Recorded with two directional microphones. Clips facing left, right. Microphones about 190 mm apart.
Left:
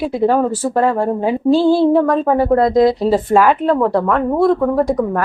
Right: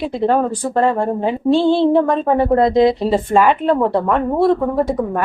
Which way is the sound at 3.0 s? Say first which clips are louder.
Left 1 dB; centre (ahead or behind).